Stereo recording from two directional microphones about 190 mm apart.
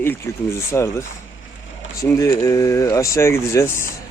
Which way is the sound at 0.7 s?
15° left (ahead or behind).